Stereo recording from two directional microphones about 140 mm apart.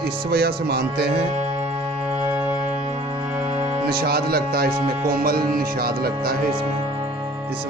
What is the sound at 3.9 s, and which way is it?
Music, 90° right.